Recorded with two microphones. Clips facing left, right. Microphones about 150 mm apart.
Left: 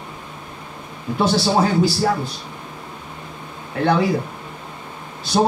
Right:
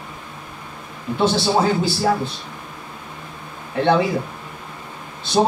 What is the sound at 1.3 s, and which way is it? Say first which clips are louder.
Speech: even; 25° right (ahead or behind).